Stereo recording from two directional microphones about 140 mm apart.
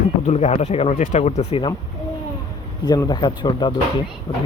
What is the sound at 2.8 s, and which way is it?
Speech, 25° left (ahead or behind).